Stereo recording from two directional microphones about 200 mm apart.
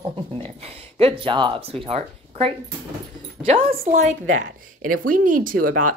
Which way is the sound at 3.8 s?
35° right (ahead or behind).